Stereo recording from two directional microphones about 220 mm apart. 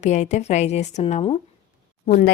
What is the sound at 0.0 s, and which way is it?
A woman's voice, 30° left (ahead or behind).